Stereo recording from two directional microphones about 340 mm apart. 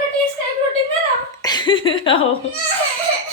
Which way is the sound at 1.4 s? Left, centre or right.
Centre.